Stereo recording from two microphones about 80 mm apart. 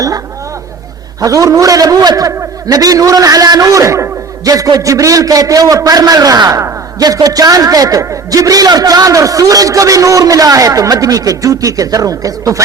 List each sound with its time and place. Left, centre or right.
1.2 s a man's voice: right